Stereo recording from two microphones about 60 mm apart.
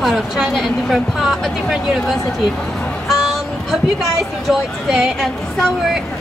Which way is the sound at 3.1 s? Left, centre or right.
Centre.